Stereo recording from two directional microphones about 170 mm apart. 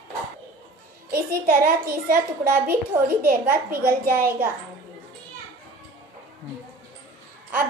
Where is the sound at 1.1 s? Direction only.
60° right (ahead or behind).